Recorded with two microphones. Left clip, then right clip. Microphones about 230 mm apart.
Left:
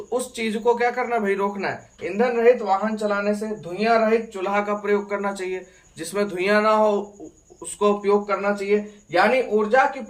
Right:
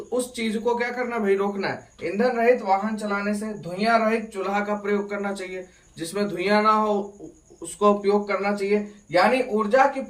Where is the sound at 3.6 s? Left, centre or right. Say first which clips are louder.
Left 1 dB; centre.